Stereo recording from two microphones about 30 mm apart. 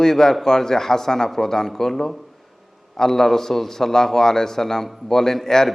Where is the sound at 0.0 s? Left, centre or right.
Centre.